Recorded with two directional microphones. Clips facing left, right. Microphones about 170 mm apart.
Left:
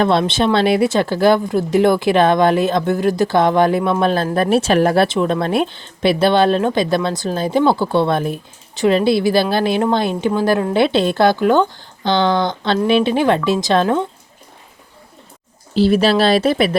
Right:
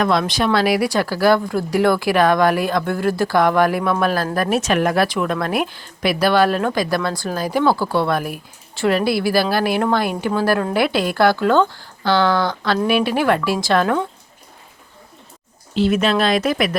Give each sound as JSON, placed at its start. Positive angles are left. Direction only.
{"t": 0.0, "sound": "a woman's voice", "side_deg": 30}
{"t": 15.7, "sound": "speech", "side_deg": 35}